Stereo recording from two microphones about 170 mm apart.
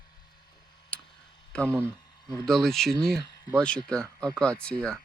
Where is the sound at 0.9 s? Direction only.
5° left (ahead or behind).